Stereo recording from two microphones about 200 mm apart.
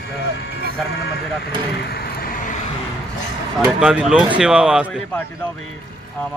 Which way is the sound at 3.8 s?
5° right (ahead or behind).